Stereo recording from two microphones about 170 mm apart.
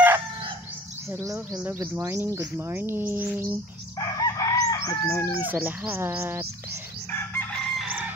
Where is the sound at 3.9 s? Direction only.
20° left (ahead or behind).